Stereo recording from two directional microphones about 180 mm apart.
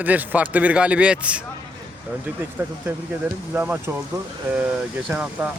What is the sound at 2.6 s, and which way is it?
Speech, 15° right (ahead or behind).